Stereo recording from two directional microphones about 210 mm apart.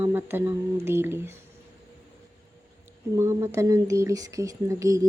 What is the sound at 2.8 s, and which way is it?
Speech, 15° right (ahead or behind).